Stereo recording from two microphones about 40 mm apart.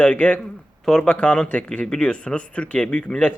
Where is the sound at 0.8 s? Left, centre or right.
Centre.